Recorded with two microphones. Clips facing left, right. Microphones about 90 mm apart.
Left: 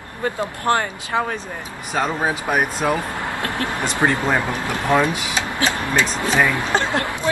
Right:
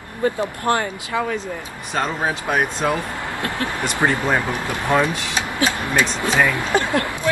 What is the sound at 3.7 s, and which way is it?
Speech, 20° left (ahead or behind).